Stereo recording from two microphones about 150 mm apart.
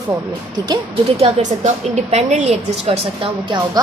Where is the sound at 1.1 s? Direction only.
45° right (ahead or behind).